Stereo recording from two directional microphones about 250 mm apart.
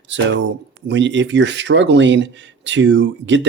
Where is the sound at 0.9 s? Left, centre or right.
Right.